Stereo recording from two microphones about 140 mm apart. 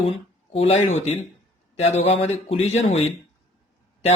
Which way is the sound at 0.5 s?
45° left (ahead or behind).